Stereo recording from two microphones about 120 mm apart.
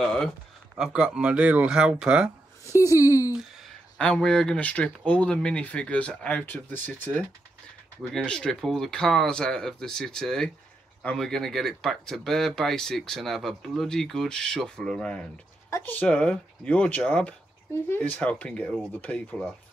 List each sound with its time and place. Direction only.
0.0 s speech: 5° left (ahead or behind)
0.7 s speech: 5° right (ahead or behind)
2.9 s speech: 25° left (ahead or behind)
4.0 s speech: 5° left (ahead or behind)